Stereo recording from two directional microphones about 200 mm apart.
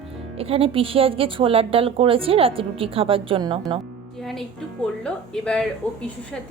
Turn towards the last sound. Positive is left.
turn(degrees=5)  # may be behind; listen again after turning